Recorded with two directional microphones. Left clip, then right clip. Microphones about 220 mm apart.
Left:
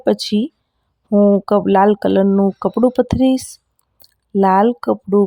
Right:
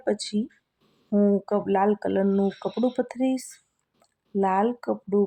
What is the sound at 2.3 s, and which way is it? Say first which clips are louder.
Speech: left 8 dB; 15° left (ahead or behind).